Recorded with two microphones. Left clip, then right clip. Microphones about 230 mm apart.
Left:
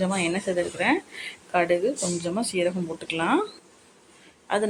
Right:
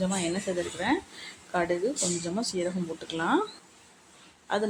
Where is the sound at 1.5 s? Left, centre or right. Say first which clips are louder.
Left 5 dB; centre.